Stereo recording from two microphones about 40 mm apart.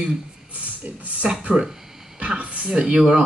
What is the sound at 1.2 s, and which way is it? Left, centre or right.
Speech, right.